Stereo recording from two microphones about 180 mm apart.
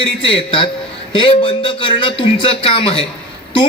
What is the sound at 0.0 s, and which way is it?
A man's voice, 30° left (ahead or behind).